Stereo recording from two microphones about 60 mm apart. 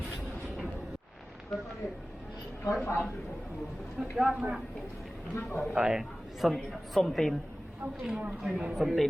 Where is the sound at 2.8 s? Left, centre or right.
Left.